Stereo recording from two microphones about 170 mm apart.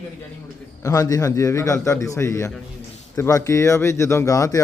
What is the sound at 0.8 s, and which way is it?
Speech, 20° left (ahead or behind).